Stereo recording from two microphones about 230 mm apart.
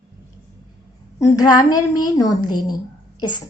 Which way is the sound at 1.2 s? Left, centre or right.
Centre.